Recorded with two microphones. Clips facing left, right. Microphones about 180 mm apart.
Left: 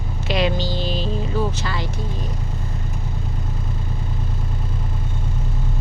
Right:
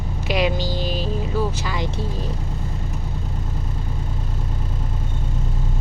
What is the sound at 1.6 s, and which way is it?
Speech, 15° right (ahead or behind).